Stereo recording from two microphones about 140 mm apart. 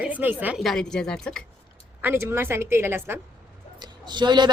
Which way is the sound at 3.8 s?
30° right (ahead or behind).